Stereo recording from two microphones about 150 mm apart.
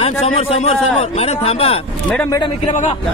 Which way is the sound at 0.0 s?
40° left (ahead or behind).